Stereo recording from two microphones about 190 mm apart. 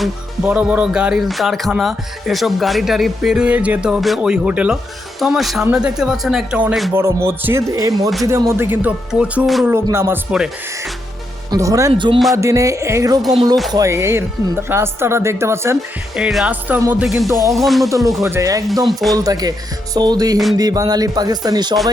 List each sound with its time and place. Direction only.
0.0 s speech: 5° right (ahead or behind)
6.9 s speech: 15° right (ahead or behind)
11.5 s speech: 15° right (ahead or behind)
16.1 s speech: 5° right (ahead or behind)
18.3 s speech: 15° right (ahead or behind)